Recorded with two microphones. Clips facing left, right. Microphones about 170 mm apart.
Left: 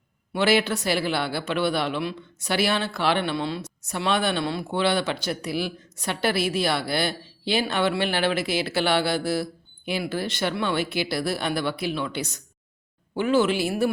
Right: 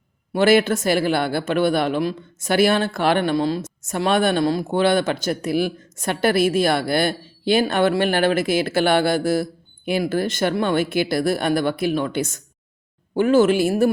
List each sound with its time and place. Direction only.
0.3 s a man's voice: 50° right (ahead or behind)